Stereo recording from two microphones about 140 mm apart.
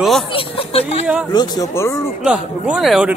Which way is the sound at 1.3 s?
30° left (ahead or behind).